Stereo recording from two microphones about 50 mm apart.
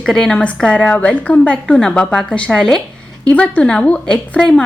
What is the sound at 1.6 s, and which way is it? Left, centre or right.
A woman's voice, centre.